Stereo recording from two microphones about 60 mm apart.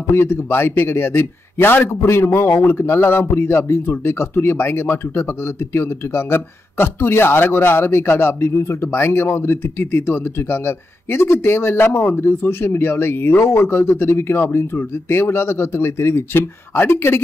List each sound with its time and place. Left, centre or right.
0.1 s speech: left